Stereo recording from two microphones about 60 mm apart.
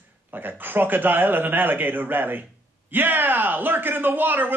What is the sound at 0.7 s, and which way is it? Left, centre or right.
Speech, right.